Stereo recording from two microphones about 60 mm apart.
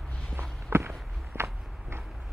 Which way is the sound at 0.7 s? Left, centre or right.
Right.